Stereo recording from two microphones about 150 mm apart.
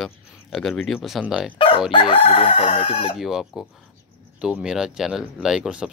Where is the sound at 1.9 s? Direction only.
35° left (ahead or behind).